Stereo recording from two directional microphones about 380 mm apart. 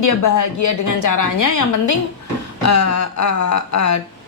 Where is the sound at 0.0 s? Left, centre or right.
Left.